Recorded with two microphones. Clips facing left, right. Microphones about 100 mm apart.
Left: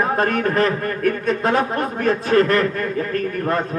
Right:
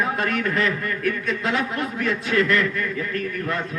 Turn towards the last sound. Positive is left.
turn(degrees=40)  # may be behind; listen again after turning